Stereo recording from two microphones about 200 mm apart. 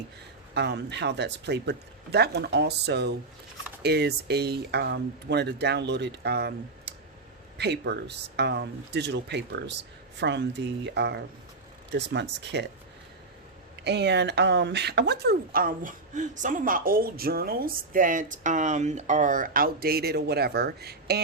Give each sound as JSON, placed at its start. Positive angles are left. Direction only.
{"t": 0.5, "sound": "speech", "side_deg": -60}
{"t": 13.8, "sound": "speech", "side_deg": -55}